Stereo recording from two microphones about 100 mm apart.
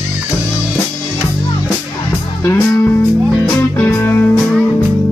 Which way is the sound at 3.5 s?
20° left (ahead or behind).